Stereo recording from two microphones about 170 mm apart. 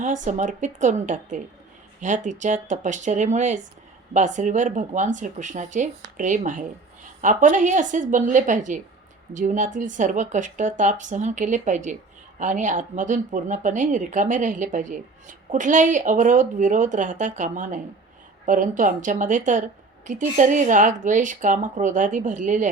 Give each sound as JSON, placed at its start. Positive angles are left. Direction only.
{"t": 0.0, "sound": "speech", "side_deg": -45}